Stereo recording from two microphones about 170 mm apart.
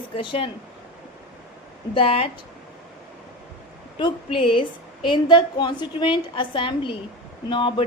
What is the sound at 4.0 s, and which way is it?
A woman's voice, 30° left (ahead or behind).